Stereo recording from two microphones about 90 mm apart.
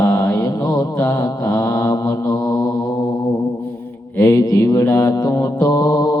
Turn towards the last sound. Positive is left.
turn(degrees=45)  # may be behind; listen again after turning